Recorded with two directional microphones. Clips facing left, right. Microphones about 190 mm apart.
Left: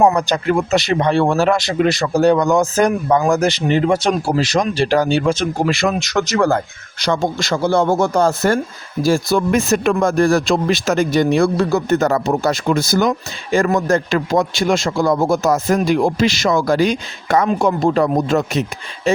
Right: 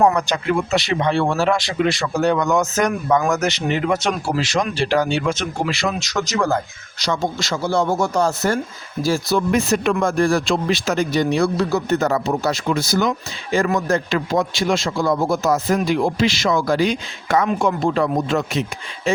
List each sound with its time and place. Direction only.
0.0 s speech: 30° left (ahead or behind)
5.6 s speech: 50° left (ahead or behind)